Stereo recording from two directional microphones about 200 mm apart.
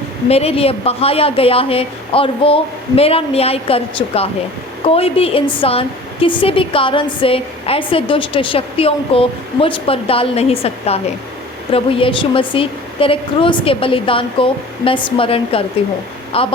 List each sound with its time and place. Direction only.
0.3 s a woman's voice: 30° left (ahead or behind)